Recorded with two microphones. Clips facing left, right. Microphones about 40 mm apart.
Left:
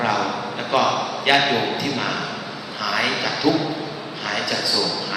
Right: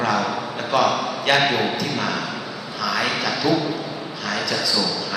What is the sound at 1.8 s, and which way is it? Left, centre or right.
Speech, left.